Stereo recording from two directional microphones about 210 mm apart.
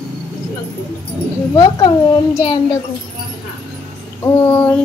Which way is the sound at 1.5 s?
20° left (ahead or behind).